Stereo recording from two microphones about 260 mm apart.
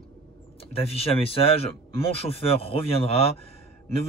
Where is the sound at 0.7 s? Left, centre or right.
Left.